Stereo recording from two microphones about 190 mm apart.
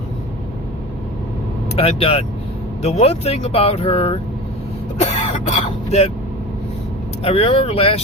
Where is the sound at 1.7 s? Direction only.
30° left (ahead or behind).